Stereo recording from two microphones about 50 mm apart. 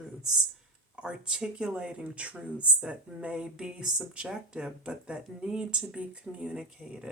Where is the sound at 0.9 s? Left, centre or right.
Centre.